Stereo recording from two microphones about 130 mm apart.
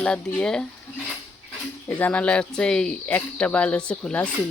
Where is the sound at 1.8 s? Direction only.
10° left (ahead or behind).